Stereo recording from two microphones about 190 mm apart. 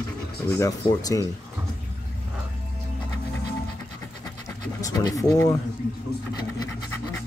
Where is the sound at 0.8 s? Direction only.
20° left (ahead or behind).